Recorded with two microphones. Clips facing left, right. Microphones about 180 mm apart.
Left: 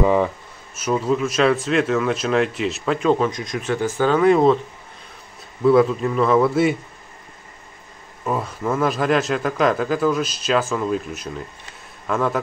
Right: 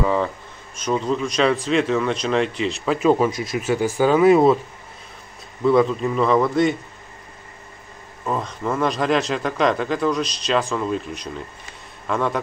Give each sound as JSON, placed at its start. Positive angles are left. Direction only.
{"t": 0.0, "sound": "speech", "side_deg": 15}
{"t": 5.6, "sound": "speech", "side_deg": 0}
{"t": 8.3, "sound": "speech", "side_deg": 5}